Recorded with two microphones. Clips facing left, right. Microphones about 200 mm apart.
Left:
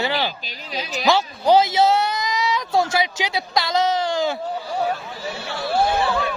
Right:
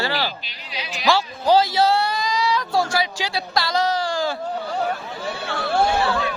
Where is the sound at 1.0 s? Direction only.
20° left (ahead or behind).